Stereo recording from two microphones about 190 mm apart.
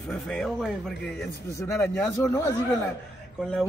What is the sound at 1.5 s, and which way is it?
Speech, 15° left (ahead or behind).